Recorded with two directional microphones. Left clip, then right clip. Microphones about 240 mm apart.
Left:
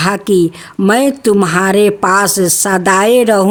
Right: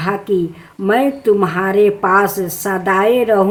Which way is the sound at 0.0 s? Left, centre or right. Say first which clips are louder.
Left 5 dB; left.